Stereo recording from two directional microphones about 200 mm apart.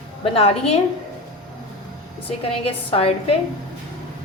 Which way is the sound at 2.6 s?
30° left (ahead or behind).